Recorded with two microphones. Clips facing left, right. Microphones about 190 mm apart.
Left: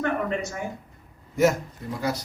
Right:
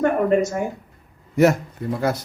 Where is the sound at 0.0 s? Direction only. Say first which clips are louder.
Right 8 dB; 45° right (ahead or behind).